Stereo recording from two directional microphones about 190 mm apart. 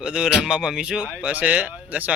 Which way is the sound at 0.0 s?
5° right (ahead or behind).